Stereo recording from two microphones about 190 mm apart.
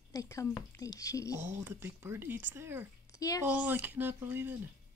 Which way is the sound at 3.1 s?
20° left (ahead or behind).